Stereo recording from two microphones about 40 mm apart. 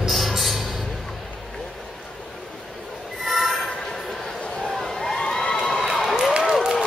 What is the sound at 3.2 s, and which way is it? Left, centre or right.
Train, centre.